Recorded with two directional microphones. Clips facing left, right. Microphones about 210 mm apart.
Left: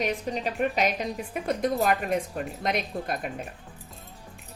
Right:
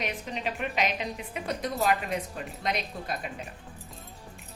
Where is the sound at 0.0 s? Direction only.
40° left (ahead or behind).